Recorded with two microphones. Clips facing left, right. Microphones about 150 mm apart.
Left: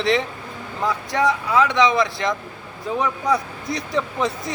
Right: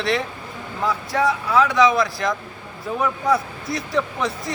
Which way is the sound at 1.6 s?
20° left (ahead or behind).